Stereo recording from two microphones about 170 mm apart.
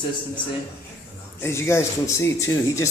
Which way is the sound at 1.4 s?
15° left (ahead or behind).